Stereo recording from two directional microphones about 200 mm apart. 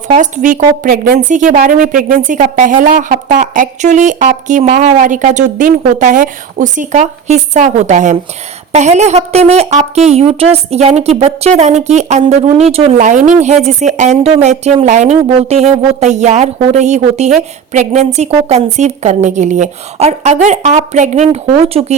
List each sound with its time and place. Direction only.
0.1 s speech: 40° right (ahead or behind)